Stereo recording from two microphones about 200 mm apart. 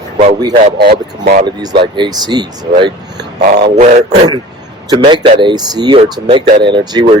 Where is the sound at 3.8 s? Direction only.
35° right (ahead or behind).